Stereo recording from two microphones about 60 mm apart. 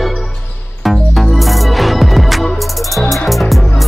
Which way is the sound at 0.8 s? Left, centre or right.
Centre.